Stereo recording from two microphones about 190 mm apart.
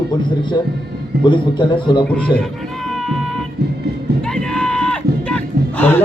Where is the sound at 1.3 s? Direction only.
25° left (ahead or behind).